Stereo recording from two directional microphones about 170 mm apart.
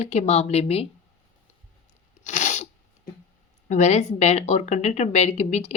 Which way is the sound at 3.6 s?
45° left (ahead or behind).